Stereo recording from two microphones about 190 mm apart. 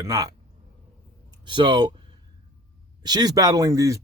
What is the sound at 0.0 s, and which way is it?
A man's voice, 20° right (ahead or behind).